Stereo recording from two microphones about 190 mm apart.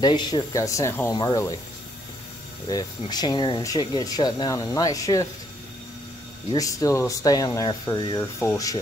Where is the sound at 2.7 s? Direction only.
20° left (ahead or behind).